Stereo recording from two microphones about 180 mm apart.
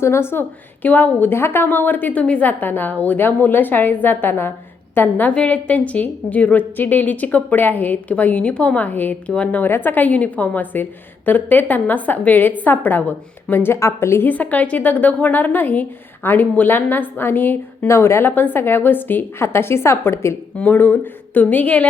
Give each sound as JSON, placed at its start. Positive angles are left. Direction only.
{"t": 0.0, "sound": "a woman's voice", "side_deg": 15}